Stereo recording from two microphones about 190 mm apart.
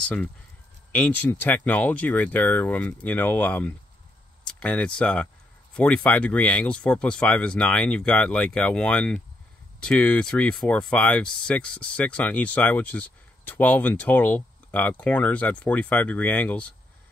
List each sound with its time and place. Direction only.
0.9 s speech: 10° left (ahead or behind)